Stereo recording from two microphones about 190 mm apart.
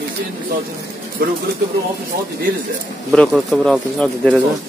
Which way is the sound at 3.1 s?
Centre (ahead or behind).